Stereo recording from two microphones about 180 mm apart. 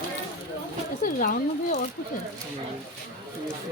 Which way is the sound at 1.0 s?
50° left (ahead or behind).